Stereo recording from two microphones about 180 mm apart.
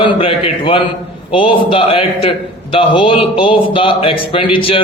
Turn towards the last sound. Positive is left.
turn(degrees=30)  # may be behind; listen again after turning